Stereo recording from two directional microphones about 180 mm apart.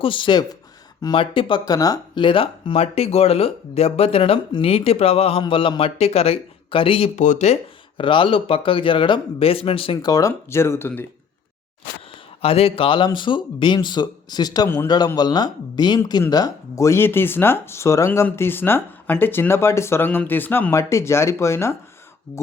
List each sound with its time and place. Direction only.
0.0 s speech: 25° left (ahead or behind)
12.4 s a man's voice: 35° left (ahead or behind); by 21.8 s 15° left (ahead or behind)